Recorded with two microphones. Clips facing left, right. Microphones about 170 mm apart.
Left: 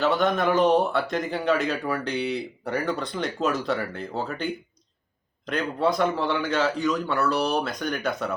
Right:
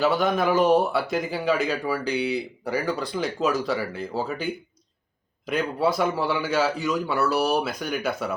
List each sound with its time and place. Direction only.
0.0 s speech: centre (ahead or behind)
5.5 s speech: 5° right (ahead or behind)